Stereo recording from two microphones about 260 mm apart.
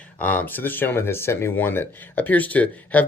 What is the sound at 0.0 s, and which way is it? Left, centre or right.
Speech, centre.